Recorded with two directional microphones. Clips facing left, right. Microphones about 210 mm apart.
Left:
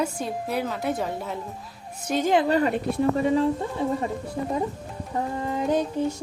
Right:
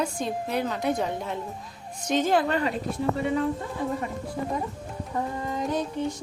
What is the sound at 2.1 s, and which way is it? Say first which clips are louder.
Speech: left 1 dB; 10° left (ahead or behind).